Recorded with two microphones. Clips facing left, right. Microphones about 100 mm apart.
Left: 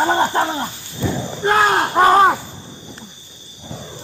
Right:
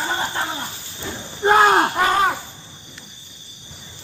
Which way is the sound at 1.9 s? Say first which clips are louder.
Left 7 dB; 35° left (ahead or behind).